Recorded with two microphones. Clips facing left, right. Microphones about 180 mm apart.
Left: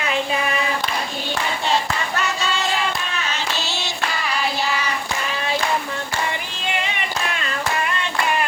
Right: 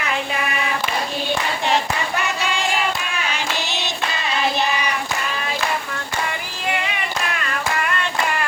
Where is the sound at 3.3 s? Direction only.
15° right (ahead or behind).